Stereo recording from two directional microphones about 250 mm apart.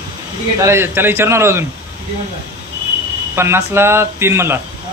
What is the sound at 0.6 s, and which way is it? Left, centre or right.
Speech, centre.